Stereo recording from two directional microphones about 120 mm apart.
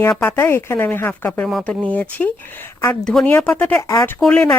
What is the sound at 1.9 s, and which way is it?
Speech, 15° left (ahead or behind).